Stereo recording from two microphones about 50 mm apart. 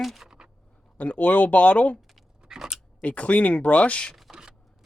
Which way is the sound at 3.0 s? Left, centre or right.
Left.